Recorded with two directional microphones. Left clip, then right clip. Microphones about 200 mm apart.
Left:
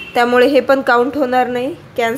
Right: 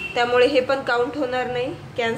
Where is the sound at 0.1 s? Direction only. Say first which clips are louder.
Left 6 dB; 45° left (ahead or behind).